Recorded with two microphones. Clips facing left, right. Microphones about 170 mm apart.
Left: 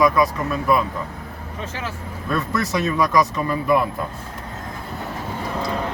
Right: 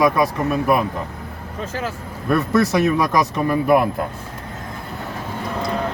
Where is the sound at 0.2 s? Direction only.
60° right (ahead or behind).